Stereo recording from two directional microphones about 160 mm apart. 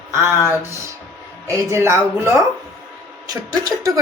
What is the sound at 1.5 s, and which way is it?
A woman's voice, 15° right (ahead or behind).